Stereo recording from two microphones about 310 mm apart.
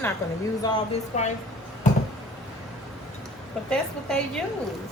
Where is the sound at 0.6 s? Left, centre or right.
Centre.